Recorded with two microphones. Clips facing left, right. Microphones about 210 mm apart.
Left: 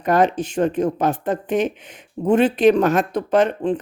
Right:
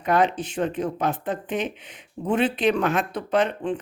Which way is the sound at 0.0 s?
45° left (ahead or behind).